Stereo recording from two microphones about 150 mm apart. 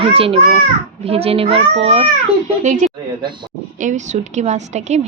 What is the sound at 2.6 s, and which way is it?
A woman's voice, 55° right (ahead or behind).